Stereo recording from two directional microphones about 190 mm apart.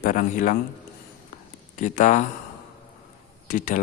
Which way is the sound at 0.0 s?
45° left (ahead or behind).